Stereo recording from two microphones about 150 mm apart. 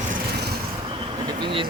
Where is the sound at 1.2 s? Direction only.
35° right (ahead or behind).